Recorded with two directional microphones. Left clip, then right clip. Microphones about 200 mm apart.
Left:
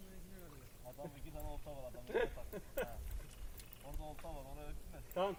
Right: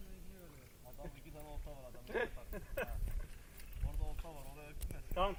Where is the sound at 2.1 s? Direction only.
55° left (ahead or behind).